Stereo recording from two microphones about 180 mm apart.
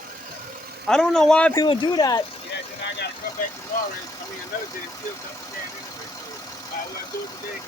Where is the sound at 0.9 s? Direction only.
5° left (ahead or behind).